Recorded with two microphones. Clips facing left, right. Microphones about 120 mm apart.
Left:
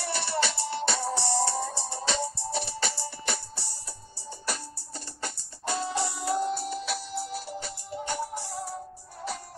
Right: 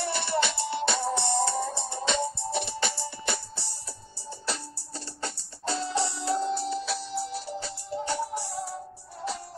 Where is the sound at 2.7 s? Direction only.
55° right (ahead or behind).